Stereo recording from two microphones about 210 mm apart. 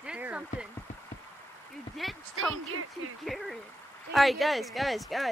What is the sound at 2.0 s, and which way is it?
Speech, centre (ahead or behind).